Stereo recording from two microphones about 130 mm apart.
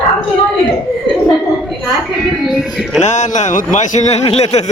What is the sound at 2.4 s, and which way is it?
Speech, centre (ahead or behind).